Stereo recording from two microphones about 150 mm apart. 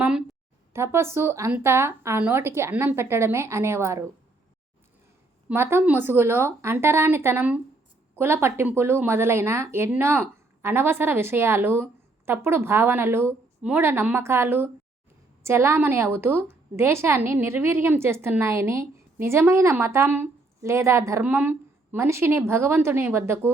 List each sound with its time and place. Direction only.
0.0 s a sound: 5° right (ahead or behind)
0.7 s a woman's voice: 15° right (ahead or behind)
5.5 s a woman's voice: 10° right (ahead or behind)